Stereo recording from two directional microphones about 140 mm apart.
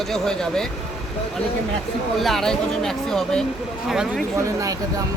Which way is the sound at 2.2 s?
Centre (ahead or behind).